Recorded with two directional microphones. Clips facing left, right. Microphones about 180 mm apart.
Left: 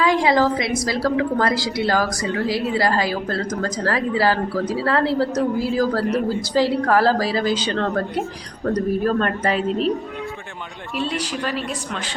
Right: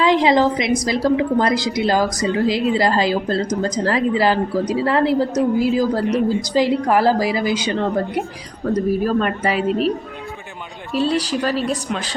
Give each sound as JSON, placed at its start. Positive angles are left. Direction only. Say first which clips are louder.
{"t": 0.0, "sound": "a woman's voice", "louder": "right 3 dB", "side_deg": -20}
{"t": 10.9, "sound": "speech", "louder": "right 6 dB", "side_deg": -35}